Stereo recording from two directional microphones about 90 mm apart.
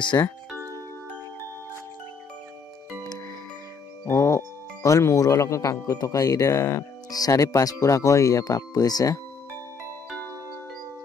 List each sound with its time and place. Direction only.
0.1 s speech: 35° left (ahead or behind)
4.0 s music: 35° left (ahead or behind)
4.8 s speech: 35° left (ahead or behind)